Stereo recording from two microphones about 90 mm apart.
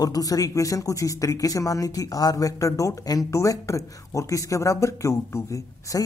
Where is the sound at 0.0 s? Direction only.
45° left (ahead or behind).